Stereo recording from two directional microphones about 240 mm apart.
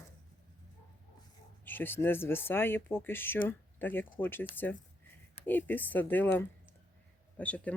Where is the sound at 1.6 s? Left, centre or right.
Centre.